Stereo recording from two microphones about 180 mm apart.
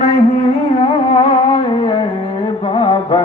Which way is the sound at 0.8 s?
30° left (ahead or behind).